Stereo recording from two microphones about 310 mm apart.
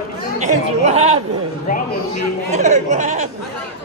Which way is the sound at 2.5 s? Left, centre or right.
Right.